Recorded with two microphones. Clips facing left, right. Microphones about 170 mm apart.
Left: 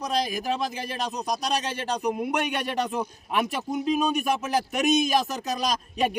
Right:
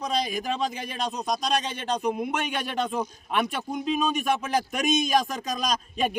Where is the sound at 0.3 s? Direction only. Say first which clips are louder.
Even; 10° left (ahead or behind).